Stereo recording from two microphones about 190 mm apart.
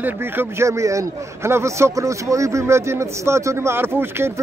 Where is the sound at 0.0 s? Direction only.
10° right (ahead or behind).